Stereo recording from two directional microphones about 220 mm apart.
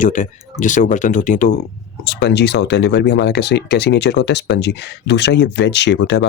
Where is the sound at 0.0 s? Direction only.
35° left (ahead or behind).